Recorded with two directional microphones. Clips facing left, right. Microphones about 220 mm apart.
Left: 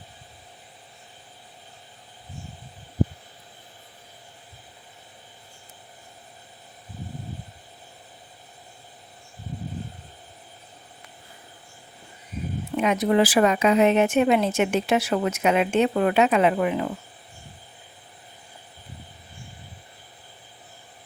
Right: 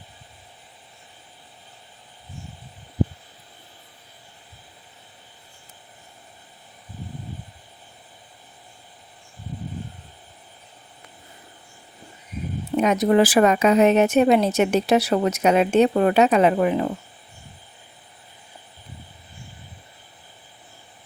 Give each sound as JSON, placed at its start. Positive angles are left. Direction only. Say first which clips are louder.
{"t": 12.7, "sound": "speech", "louder": "right 3 dB", "side_deg": -40}